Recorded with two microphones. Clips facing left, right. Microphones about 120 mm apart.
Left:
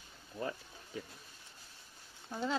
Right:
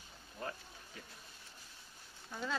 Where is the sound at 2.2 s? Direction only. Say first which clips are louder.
Left 5 dB; 25° left (ahead or behind).